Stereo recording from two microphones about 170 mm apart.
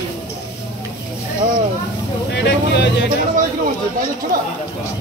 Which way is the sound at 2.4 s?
85° left.